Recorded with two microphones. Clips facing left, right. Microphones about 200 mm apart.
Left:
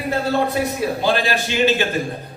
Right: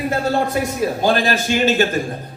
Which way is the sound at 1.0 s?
45° right (ahead or behind).